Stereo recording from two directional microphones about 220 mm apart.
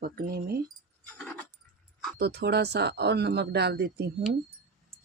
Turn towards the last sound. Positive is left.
turn(degrees=-50)  # may be behind; listen again after turning